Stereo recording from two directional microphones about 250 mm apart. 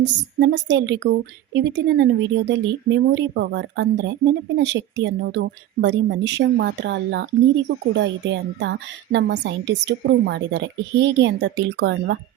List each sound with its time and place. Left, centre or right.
0.0 s a woman's voice: right